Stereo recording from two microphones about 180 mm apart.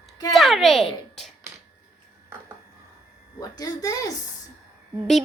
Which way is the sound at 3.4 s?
20° left (ahead or behind).